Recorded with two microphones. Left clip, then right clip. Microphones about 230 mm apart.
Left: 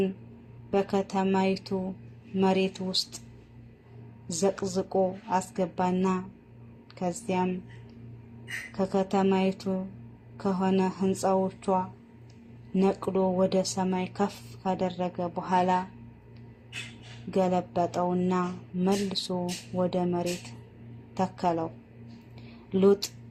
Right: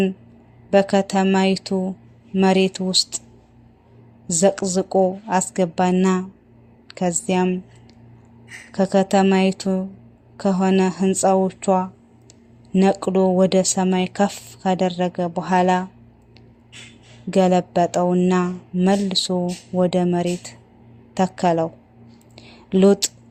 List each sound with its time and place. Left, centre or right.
0.7 s speech: right
4.3 s speech: right
8.7 s speech: right
17.3 s speech: right
22.4 s a sound: right